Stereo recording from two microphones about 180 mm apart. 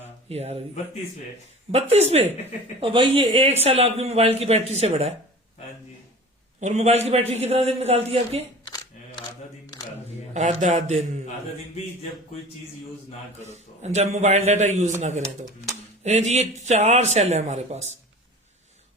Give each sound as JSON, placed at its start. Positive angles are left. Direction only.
{"t": 0.3, "sound": "speech", "side_deg": -35}
{"t": 1.7, "sound": "speech", "side_deg": -35}
{"t": 6.6, "sound": "speech", "side_deg": -40}
{"t": 10.3, "sound": "speech", "side_deg": -40}
{"t": 13.4, "sound": "speech", "side_deg": -40}
{"t": 16.0, "sound": "speech", "side_deg": -40}